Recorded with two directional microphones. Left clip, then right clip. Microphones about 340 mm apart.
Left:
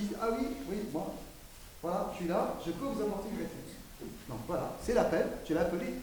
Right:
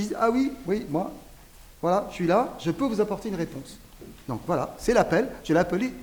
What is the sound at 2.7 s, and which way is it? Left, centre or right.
Speech, right.